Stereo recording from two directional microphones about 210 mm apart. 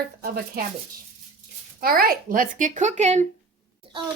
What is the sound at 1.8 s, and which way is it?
Speech, 45° right (ahead or behind).